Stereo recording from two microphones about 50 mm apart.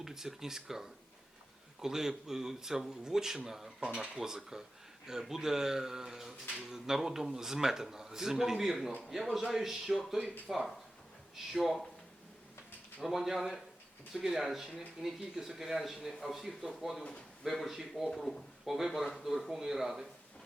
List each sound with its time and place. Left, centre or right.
0.0 s speech: centre
13.0 s speech: centre
17.0 s speech: left
17.4 s speech: centre
18.1 s speech: centre